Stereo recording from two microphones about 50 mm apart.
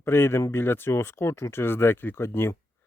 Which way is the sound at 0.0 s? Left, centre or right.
Left.